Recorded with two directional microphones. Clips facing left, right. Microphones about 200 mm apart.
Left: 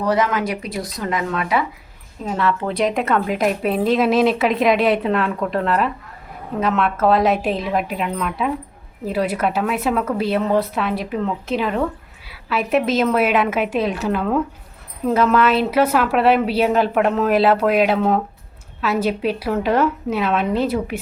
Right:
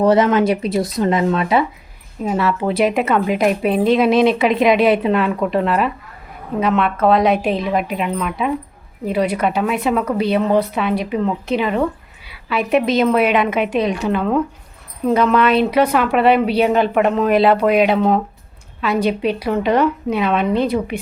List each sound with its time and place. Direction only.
0.0 s speech: 25° right (ahead or behind)
2.2 s a woman's voice: 10° right (ahead or behind)